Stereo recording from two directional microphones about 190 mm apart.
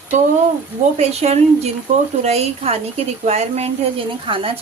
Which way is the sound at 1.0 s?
35° right (ahead or behind).